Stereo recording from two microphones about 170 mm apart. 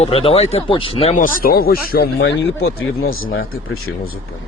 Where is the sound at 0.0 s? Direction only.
35° left (ahead or behind).